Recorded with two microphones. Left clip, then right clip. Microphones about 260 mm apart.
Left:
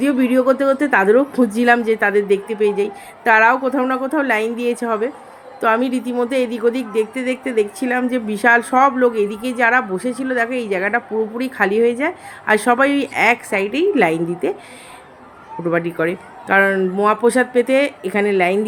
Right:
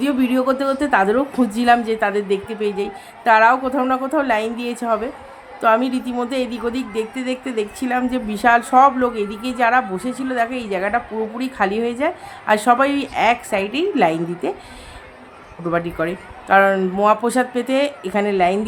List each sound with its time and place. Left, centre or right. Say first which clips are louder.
0.0 s speech: left 3 dB; centre
15.7 s speech: left 2 dB; centre